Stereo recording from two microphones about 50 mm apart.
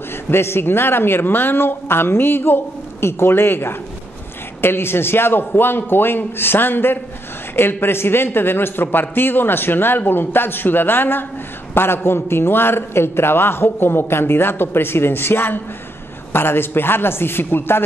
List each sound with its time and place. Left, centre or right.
0.3 s a man's voice: left